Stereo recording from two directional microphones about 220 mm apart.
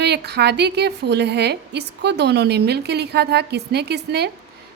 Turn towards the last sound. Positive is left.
turn(degrees=-50)  # may be behind; listen again after turning